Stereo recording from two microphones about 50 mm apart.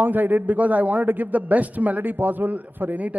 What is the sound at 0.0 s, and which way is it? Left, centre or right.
A man's voice, right.